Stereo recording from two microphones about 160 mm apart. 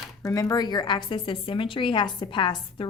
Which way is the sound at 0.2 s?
20° left (ahead or behind).